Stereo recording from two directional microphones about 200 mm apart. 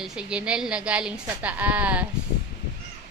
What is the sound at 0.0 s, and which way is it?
A woman's voice, 5° right (ahead or behind).